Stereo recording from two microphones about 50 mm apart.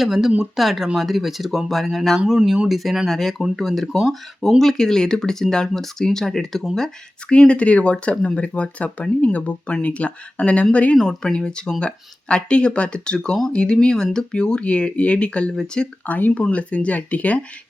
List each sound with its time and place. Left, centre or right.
0.0 s speech: centre; by 13.1 s left
13.1 s speech: centre
13.5 s speech: centre
16.0 s speech: left